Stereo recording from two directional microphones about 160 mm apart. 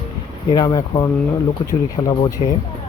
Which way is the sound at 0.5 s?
25° left (ahead or behind).